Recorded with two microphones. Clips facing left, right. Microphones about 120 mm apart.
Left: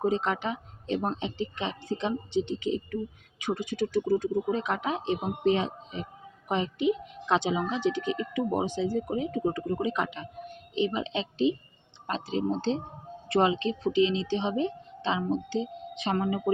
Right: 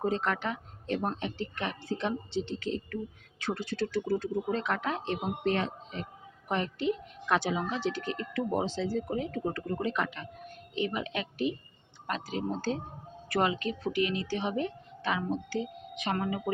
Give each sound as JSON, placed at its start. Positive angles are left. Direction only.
{"t": 0.0, "sound": "speech", "side_deg": 15}